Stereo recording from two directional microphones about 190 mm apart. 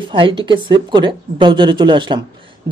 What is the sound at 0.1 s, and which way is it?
Speech, 25° right (ahead or behind).